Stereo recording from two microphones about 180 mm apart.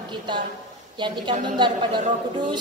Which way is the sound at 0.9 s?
25° right (ahead or behind).